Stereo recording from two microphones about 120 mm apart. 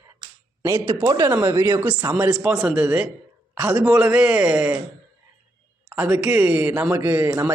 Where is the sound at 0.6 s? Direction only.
25° right (ahead or behind); by 4.7 s 5° right (ahead or behind).